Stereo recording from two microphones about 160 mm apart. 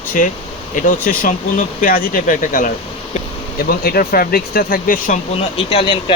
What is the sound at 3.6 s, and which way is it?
Speech, 70° left (ahead or behind).